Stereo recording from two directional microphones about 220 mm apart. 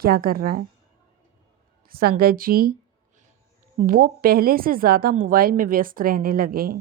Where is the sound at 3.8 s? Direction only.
40° right (ahead or behind).